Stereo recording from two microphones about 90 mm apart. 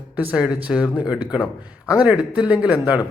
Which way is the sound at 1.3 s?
55° left (ahead or behind).